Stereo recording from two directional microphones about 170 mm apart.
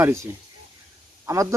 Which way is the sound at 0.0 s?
15° right (ahead or behind).